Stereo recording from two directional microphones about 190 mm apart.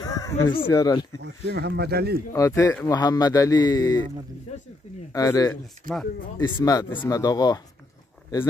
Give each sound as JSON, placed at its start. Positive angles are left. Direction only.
{"t": 0.0, "sound": "a sound", "side_deg": 20}
{"t": 0.7, "sound": "speech", "side_deg": 20}
{"t": 1.2, "sound": "speech", "side_deg": -60}
{"t": 2.3, "sound": "a man's voice", "side_deg": 15}
{"t": 4.5, "sound": "speech", "side_deg": 35}
{"t": 5.1, "sound": "a man's voice", "side_deg": 20}
{"t": 5.9, "sound": "speech", "side_deg": -45}
{"t": 6.5, "sound": "a man's voice", "side_deg": 20}